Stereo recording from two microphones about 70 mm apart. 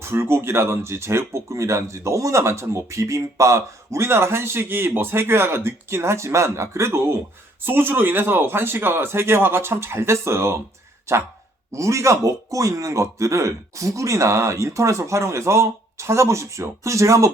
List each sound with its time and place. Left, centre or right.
0.0 s a man's voice: right